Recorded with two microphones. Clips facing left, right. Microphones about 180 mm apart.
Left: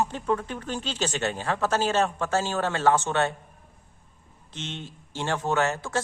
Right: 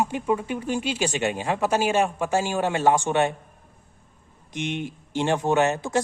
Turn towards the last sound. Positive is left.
turn(degrees=-15)  # may be behind; listen again after turning